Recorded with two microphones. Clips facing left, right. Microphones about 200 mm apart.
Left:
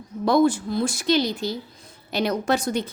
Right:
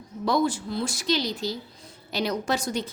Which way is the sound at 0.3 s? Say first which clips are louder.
Left 6 dB; 55° left (ahead or behind).